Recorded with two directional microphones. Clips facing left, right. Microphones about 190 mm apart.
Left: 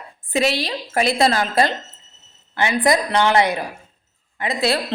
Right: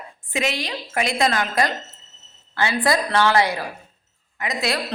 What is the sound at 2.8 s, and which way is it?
A woman's voice, 20° left (ahead or behind).